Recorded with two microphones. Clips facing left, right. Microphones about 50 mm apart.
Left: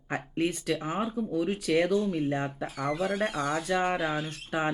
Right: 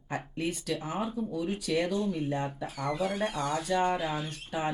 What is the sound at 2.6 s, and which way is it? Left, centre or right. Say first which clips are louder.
Speech: left 2 dB; centre.